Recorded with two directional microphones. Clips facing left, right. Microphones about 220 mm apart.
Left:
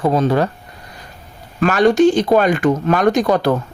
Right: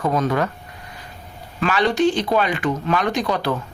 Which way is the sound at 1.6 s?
45° left (ahead or behind).